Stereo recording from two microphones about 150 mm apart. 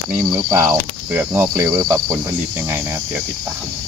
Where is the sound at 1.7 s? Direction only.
20° right (ahead or behind).